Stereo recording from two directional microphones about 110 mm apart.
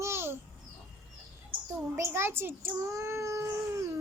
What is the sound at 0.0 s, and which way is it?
Babbling, 20° right (ahead or behind).